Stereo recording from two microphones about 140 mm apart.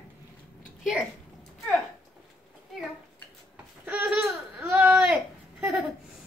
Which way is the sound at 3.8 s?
10° right (ahead or behind).